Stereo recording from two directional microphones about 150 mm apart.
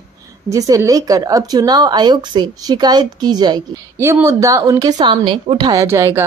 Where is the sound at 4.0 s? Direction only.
15° right (ahead or behind).